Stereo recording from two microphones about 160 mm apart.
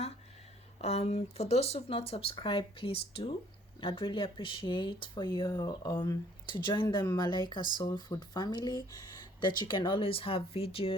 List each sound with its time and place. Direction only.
0.8 s speech: 40° left (ahead or behind)
5.5 s speech: 20° left (ahead or behind); by 10.9 s 35° left (ahead or behind)